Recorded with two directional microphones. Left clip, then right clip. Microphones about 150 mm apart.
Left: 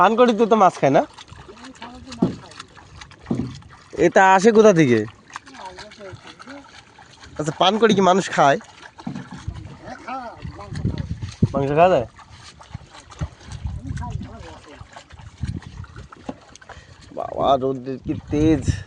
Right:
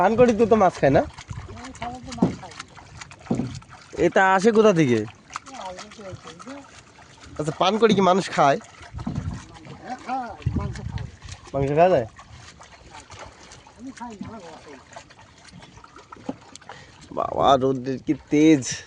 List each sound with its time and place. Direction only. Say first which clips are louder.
0.0 s a sound: left 2 dB; 5° left (ahead or behind)
4.0 s a sound: left 4 dB; 15° left (ahead or behind)
7.3 s speech: left 3 dB; 15° left (ahead or behind)
10.7 s boat: left 6 dB; 15° left (ahead or behind)
11.5 s speech: left 2 dB; 25° left (ahead or behind)
17.2 s speech: right 1 dB; 30° right (ahead or behind)